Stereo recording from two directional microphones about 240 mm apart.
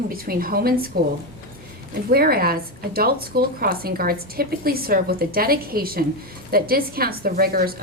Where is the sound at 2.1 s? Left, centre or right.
Right.